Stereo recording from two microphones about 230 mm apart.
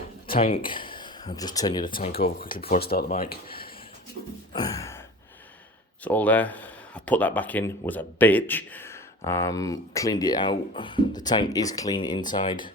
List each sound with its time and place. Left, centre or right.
0.7 s speech: left
2.4 s speech: left
4.5 s gasp: centre
6.1 s speech: centre